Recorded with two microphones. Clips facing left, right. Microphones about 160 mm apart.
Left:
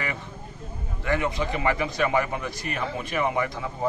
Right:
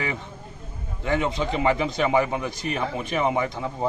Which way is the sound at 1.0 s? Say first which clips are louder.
Right 2 dB; 20° right (ahead or behind).